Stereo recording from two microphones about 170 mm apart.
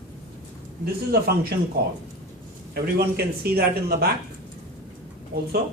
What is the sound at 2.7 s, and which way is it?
Speech, 70° right (ahead or behind).